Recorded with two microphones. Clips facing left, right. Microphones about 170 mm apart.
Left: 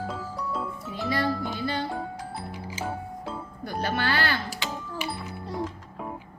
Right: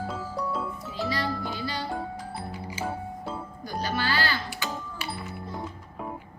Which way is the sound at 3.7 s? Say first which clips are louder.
Left 2 dB; 60° left (ahead or behind).